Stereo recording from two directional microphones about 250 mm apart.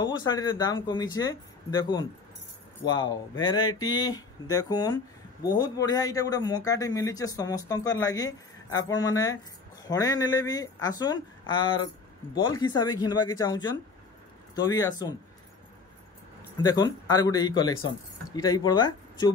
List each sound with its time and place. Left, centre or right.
0.0 s speech: centre
16.6 s speech: centre